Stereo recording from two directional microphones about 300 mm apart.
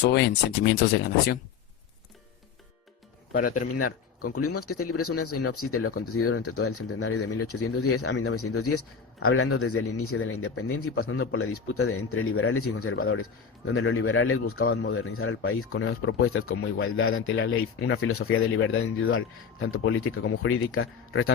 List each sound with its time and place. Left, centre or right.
0.0 s speech: left
3.3 s speech: left
3.8 s speech: left